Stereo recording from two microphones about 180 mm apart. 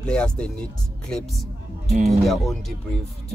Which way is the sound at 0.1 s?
5° left (ahead or behind).